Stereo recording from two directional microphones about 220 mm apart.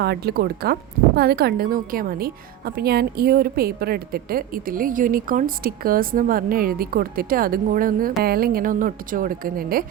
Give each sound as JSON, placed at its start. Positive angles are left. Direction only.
{"t": 0.0, "sound": "speech", "side_deg": -45}